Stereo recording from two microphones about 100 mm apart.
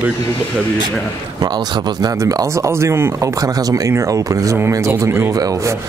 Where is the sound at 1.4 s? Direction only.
45° right (ahead or behind).